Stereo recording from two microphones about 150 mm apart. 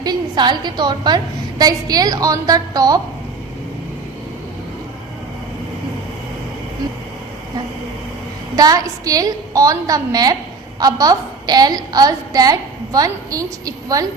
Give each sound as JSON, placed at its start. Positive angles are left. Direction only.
{"t": 0.0, "sound": "a woman's voice", "side_deg": -30}
{"t": 8.5, "sound": "a woman's voice", "side_deg": -25}